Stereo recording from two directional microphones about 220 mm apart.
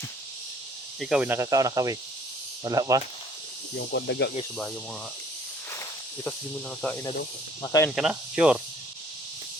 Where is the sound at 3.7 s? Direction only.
50° left (ahead or behind).